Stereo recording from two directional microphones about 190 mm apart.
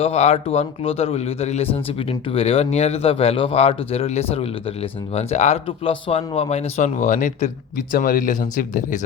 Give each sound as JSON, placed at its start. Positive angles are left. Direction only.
{"t": 0.0, "sound": "speech", "side_deg": 35}